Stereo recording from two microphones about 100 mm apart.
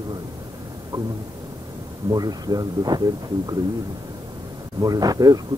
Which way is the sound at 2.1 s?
40° right (ahead or behind).